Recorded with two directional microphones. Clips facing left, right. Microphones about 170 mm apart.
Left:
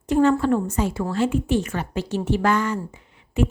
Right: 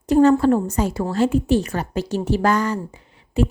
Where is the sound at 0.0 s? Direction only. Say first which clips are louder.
Right 4 dB; 40° right (ahead or behind).